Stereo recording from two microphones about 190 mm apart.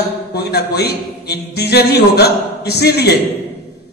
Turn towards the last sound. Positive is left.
turn(degrees=60)  # may be behind; listen again after turning